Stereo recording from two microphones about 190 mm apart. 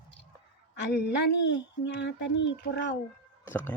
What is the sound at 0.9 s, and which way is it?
Speech, 65° left (ahead or behind).